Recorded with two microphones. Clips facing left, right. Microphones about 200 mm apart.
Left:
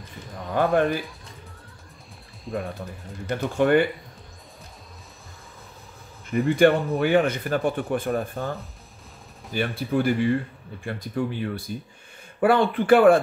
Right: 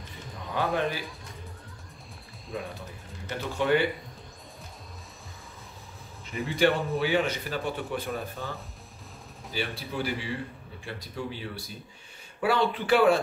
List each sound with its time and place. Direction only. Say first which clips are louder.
0.7 s speech: left 7 dB; 50° left (ahead or behind)
3.3 s speech: left 5 dB; 50° left (ahead or behind)
6.3 s speech: left 7 dB; 55° left (ahead or behind)